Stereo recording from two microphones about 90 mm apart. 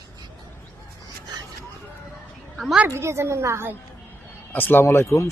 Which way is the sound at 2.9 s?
30° right (ahead or behind).